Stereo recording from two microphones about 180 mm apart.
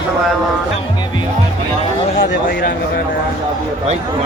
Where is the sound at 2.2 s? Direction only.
60° left (ahead or behind).